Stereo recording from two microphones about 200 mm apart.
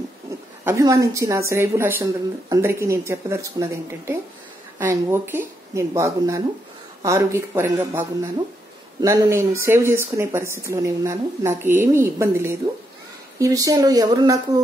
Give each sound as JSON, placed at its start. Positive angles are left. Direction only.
{"t": 0.7, "sound": "speech", "side_deg": -15}